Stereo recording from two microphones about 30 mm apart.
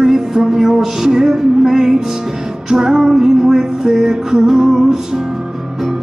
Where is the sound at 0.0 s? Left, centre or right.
Centre.